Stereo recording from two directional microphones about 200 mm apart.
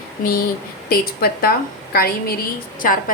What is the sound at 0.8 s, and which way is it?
A woman's voice, 50° left (ahead or behind).